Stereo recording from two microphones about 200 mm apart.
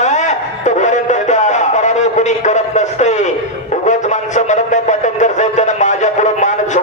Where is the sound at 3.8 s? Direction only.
35° left (ahead or behind).